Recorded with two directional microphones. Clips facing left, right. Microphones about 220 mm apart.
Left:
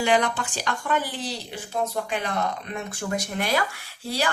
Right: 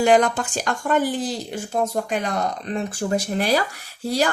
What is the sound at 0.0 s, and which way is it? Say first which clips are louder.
Speech: right 6 dB; 45° right (ahead or behind).